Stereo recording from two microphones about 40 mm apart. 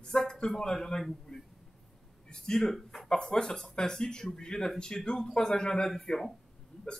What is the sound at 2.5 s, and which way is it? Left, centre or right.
Speech, centre.